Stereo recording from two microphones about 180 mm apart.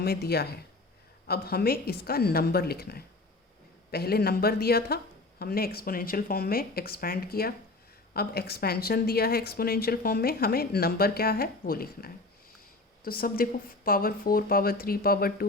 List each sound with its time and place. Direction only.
0.0 s a woman's voice: 60° left (ahead or behind)